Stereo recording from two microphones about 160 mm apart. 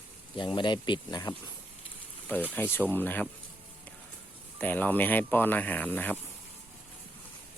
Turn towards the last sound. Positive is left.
turn(degrees=10)  # may be behind; listen again after turning